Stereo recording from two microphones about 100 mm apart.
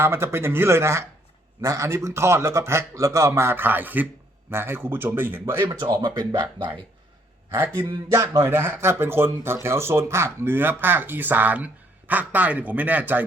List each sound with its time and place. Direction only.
0.0 s speech: 25° right (ahead or behind)
5.6 s speech: 45° right (ahead or behind)
8.1 s speech: 30° right (ahead or behind)